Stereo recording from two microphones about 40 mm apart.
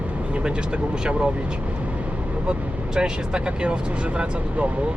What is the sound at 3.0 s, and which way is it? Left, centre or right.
Speech, right.